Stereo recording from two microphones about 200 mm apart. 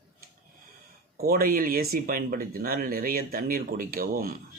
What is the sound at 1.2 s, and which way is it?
Speech, 50° right (ahead or behind).